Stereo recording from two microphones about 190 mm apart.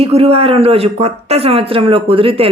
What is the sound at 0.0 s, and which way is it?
A man's voice, 30° right (ahead or behind).